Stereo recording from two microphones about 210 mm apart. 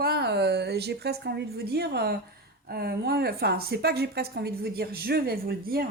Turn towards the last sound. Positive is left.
turn(degrees=-45)  # may be behind; listen again after turning